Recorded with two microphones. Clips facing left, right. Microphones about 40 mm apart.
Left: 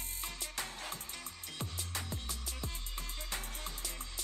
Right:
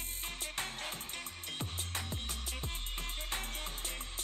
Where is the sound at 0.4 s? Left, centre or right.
Right.